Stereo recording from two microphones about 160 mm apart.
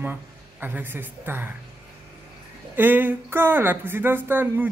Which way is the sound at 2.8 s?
10° right (ahead or behind).